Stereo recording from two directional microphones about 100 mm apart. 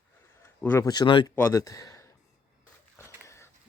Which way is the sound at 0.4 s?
25° left (ahead or behind).